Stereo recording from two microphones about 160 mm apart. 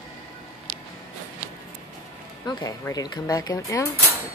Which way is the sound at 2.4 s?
20° left (ahead or behind).